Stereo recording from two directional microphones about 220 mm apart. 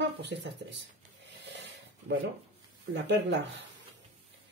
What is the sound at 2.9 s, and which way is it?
Speech, 55° right (ahead or behind).